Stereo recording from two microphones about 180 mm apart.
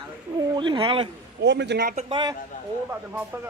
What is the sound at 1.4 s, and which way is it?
Speech, 70° right (ahead or behind).